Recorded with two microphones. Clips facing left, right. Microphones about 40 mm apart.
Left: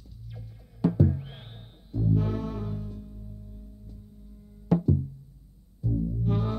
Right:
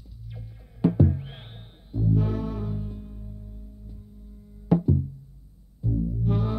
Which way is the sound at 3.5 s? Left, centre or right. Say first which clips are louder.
Right 1 dB; centre.